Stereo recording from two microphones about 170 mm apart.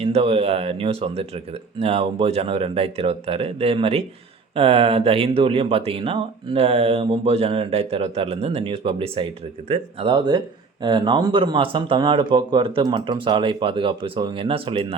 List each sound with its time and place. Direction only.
0.0 s speech: 35° right (ahead or behind)